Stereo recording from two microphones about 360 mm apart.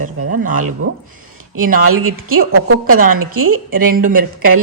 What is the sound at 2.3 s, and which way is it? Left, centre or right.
Speech, right.